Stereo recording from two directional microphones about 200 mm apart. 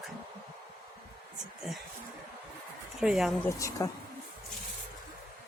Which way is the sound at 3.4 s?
15° left (ahead or behind).